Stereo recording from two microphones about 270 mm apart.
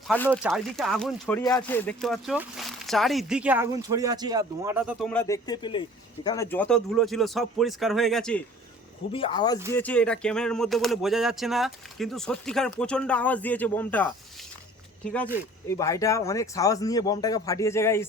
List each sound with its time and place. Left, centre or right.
0.3 s speech: centre
9.1 s speech: centre
9.7 s speech: centre